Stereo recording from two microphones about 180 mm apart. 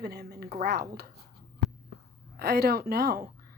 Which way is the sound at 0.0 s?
65° right (ahead or behind).